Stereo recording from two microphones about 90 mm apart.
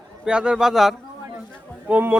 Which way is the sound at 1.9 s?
20° right (ahead or behind).